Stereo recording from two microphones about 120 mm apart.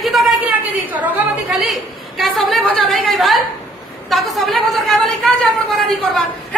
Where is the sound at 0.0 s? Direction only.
Centre (ahead or behind).